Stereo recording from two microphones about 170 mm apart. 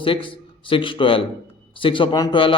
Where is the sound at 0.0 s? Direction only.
30° left (ahead or behind).